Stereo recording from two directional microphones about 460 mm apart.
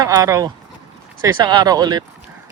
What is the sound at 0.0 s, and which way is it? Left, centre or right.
Speech, centre.